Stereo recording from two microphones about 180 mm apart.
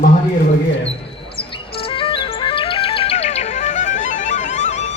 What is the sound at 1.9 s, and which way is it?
Music, 30° left (ahead or behind).